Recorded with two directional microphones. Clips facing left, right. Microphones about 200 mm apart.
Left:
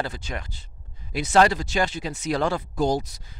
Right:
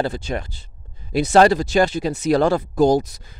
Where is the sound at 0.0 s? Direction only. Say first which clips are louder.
Right 7 dB; 30° right (ahead or behind).